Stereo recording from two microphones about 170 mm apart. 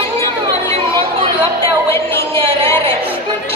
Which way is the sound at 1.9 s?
15° left (ahead or behind).